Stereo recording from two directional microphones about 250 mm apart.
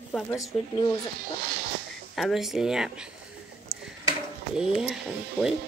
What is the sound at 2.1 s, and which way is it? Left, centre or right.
Speech, centre.